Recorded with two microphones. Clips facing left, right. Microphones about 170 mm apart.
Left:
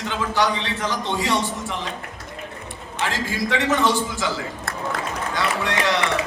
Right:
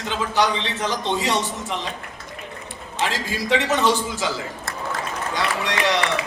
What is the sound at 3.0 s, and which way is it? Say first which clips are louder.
A man's voice: even; 15° right (ahead or behind).